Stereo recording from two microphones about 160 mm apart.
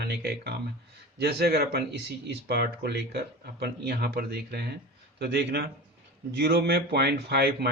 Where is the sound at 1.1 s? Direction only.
80° right.